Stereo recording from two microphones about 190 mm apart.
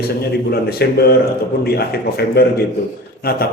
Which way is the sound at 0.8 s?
55° left (ahead or behind).